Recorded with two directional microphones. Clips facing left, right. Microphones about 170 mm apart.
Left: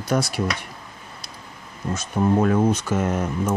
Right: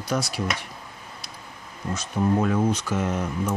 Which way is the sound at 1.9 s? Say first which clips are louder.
Left 3 dB; 50° left (ahead or behind).